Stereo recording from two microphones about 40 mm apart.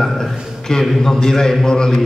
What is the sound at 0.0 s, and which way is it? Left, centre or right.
A man's voice, centre.